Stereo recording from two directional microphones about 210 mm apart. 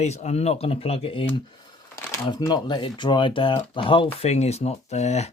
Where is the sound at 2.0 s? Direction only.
15° left (ahead or behind).